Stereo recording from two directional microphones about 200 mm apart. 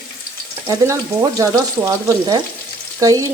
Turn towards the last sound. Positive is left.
turn(degrees=-15)  # may be behind; listen again after turning